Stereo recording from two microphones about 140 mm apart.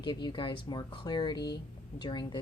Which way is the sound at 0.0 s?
30° left (ahead or behind).